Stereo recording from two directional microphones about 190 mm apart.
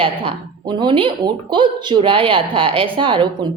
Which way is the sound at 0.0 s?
25° right (ahead or behind).